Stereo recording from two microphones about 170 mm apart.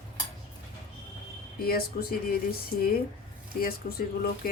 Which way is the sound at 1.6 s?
60° left (ahead or behind).